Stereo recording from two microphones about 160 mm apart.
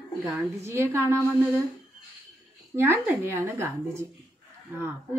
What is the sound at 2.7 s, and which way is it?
Speech, 15° right (ahead or behind).